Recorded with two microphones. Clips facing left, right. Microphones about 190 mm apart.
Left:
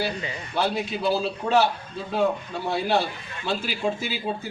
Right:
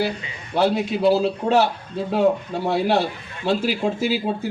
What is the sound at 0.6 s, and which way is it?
A man's voice, 65° right (ahead or behind).